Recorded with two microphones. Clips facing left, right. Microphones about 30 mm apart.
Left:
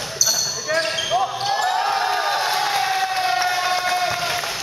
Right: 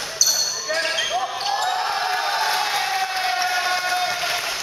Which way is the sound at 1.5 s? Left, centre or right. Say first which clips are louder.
Left 2 dB; centre.